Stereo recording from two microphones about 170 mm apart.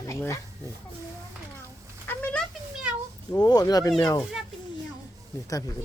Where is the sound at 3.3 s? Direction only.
20° left (ahead or behind).